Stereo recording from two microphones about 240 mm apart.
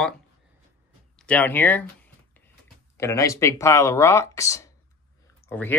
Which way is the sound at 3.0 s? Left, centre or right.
Centre.